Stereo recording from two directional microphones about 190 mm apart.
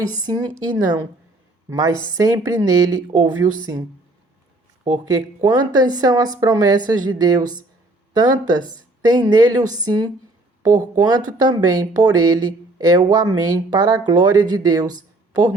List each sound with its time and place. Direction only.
0.0 s a woman's voice: 20° right (ahead or behind)